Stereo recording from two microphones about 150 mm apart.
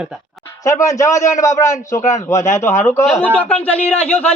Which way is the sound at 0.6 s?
20° left (ahead or behind).